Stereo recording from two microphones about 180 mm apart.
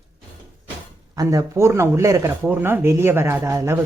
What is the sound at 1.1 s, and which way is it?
Speech, 20° right (ahead or behind).